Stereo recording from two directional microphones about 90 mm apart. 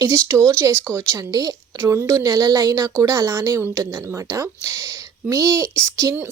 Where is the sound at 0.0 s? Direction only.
35° right (ahead or behind).